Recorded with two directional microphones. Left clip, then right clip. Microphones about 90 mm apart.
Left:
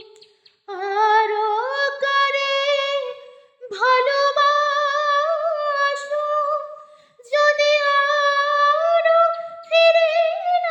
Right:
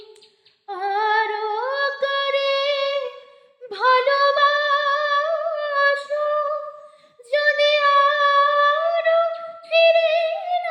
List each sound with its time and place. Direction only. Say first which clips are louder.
0.7 s music: left 3 dB; 30° left (ahead or behind)
3.7 s female singing: even; 30° left (ahead or behind)
7.3 s child singing: left 1 dB; 40° left (ahead or behind)
9.6 s music: left 1 dB; 40° left (ahead or behind)